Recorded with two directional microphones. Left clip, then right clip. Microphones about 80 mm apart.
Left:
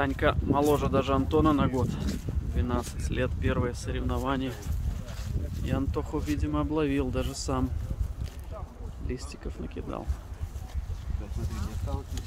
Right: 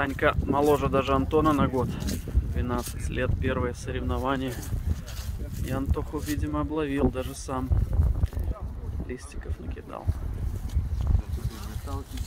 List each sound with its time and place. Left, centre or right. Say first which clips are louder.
0.0 s speech: right 2 dB; centre
5.7 s speech: even; left